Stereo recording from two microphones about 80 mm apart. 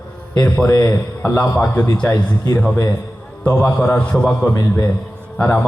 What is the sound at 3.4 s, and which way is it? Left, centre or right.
A man's voice, left.